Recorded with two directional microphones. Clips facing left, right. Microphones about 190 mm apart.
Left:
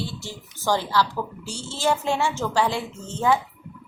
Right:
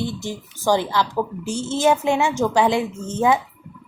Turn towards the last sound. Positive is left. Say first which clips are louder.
# right 3 dB
turn(degrees=-20)  # may be behind; listen again after turning